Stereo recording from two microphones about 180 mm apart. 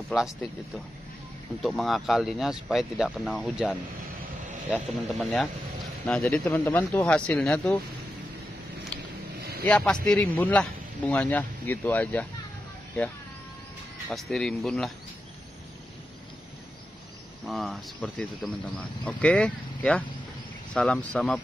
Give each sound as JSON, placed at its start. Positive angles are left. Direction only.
{"t": 0.1, "sound": "speech", "side_deg": -5}
{"t": 1.6, "sound": "speech", "side_deg": 0}
{"t": 6.0, "sound": "speech", "side_deg": 5}
{"t": 9.4, "sound": "vehicle", "side_deg": -60}
{"t": 9.7, "sound": "speech", "side_deg": 5}
{"t": 14.0, "sound": "speech", "side_deg": 5}
{"t": 17.5, "sound": "speech", "side_deg": 0}